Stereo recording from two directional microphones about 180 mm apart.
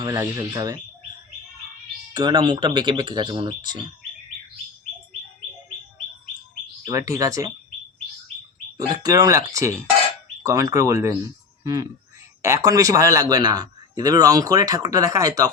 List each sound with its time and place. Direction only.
0.0 s a man's voice: 20° right (ahead or behind)
2.1 s a man's voice: 25° right (ahead or behind)
6.8 s speech: 20° right (ahead or behind)
8.9 s a man's voice: 20° right (ahead or behind)